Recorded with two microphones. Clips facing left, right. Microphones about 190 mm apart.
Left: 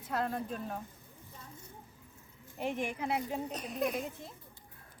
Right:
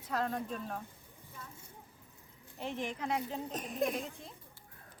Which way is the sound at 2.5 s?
15° left (ahead or behind).